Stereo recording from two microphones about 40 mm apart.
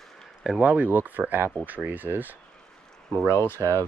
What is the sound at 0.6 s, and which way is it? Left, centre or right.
Speech, right.